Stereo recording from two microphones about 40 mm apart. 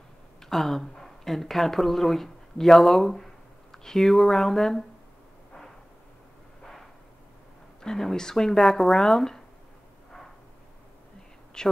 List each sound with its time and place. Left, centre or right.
0.4 s speech: centre
6.6 s a sound: centre
7.8 s speech: centre
11.6 s speech: centre